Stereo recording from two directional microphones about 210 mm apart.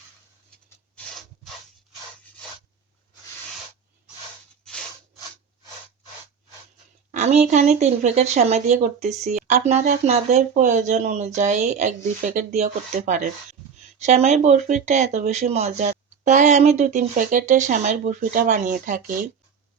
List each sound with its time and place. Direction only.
0.9 s rub: centre (ahead or behind)
7.1 s speech: 30° right (ahead or behind)